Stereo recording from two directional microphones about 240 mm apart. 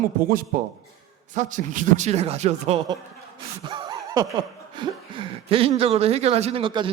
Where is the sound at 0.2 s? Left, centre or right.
Right.